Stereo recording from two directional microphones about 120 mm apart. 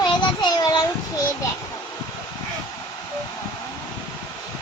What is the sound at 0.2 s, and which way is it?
Child singing, 35° left (ahead or behind).